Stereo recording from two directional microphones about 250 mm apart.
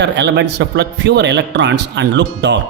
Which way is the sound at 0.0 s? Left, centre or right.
Right.